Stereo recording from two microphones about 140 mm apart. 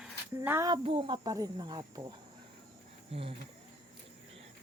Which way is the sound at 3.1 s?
40° right (ahead or behind).